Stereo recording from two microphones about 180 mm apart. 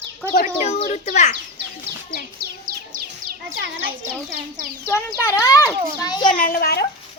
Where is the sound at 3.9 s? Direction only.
50° right (ahead or behind).